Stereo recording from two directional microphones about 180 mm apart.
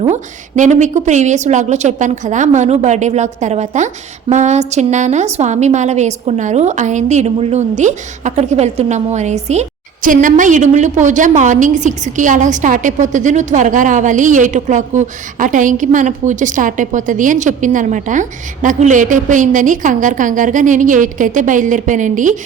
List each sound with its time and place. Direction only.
0.1 s a woman's voice: 40° right (ahead or behind)